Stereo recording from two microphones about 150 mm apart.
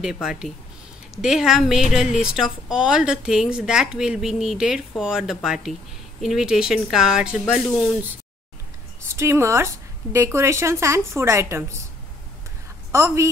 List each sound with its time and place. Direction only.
0.0 s speech: 5° right (ahead or behind)
9.0 s speech: 15° right (ahead or behind)
12.9 s speech: 20° right (ahead or behind)